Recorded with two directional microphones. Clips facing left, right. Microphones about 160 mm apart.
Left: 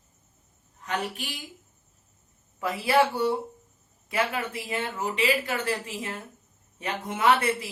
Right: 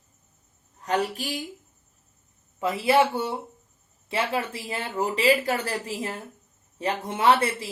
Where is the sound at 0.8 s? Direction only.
35° right (ahead or behind).